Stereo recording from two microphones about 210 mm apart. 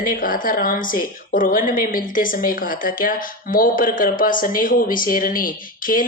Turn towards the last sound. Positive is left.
turn(degrees=40)  # may be behind; listen again after turning